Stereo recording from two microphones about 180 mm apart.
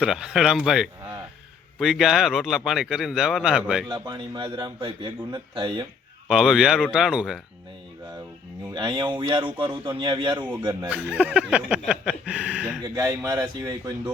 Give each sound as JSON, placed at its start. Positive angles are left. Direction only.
{"t": 0.0, "sound": "speech", "side_deg": -5}
{"t": 3.8, "sound": "a man's voice", "side_deg": -25}
{"t": 6.2, "sound": "speech", "side_deg": -5}
{"t": 8.7, "sound": "a man's voice", "side_deg": -25}
{"t": 11.0, "sound": "speech", "side_deg": -5}
{"t": 12.8, "sound": "a man's voice", "side_deg": -15}